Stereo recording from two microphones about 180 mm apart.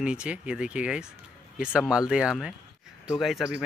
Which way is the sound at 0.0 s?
5° right (ahead or behind).